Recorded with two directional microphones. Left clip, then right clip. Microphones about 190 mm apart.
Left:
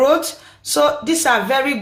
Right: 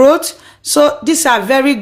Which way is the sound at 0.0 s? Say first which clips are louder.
Right 6 dB; 45° right (ahead or behind).